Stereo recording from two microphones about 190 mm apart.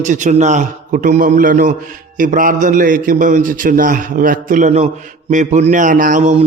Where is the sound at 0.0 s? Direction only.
40° right (ahead or behind).